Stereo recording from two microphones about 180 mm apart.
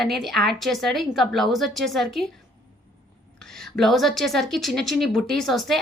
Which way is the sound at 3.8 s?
Centre (ahead or behind).